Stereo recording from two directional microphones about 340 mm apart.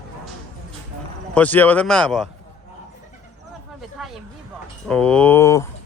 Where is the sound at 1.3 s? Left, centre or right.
Centre.